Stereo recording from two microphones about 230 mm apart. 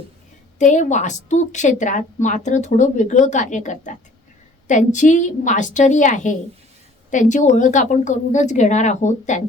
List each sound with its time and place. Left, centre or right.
0.6 s a woman's voice: left